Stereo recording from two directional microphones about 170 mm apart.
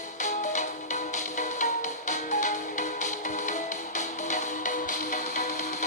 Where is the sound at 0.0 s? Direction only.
45° left (ahead or behind).